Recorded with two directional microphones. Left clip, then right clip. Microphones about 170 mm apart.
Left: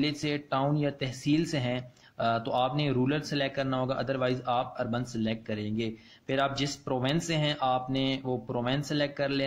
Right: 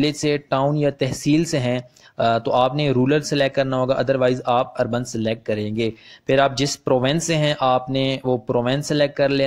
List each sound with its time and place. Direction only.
0.0 s speech: 40° right (ahead or behind)